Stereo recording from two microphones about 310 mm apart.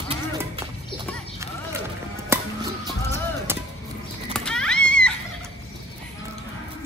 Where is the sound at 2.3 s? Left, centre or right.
Centre.